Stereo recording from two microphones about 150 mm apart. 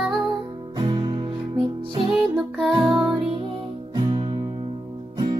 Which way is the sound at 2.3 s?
Centre (ahead or behind).